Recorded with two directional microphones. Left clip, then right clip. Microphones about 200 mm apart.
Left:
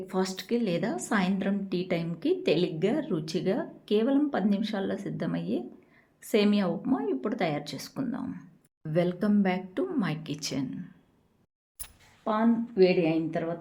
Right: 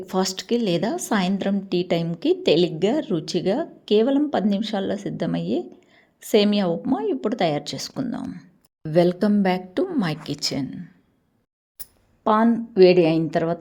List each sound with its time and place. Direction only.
0.0 s a woman's voice: 40° right (ahead or behind)
8.0 s speech: 25° right (ahead or behind)
8.8 s a woman's voice: 35° right (ahead or behind)
12.2 s a woman's voice: 45° right (ahead or behind)